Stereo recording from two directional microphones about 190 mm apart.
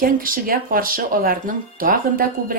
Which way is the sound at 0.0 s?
50° right (ahead or behind).